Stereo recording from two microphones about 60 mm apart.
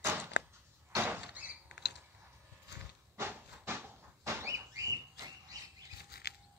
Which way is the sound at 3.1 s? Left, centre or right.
Right.